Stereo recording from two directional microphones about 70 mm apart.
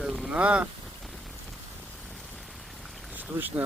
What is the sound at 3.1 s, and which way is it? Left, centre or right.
Speech, right.